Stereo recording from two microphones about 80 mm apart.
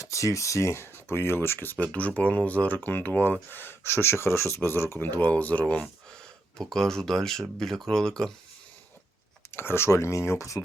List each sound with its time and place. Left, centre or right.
0.0 s speech: left; by 8.3 s centre
9.5 s speech: left